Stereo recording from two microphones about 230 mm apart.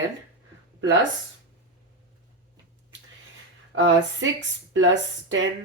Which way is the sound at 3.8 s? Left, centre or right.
Right.